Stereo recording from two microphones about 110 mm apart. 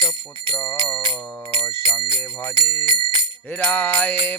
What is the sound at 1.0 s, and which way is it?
Music, 45° right (ahead or behind).